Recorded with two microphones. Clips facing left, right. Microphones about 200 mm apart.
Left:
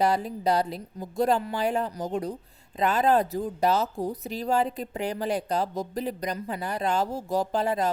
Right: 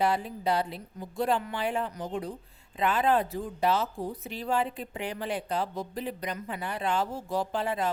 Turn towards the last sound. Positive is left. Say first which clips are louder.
# left 4 dB
turn(degrees=40)  # may be behind; listen again after turning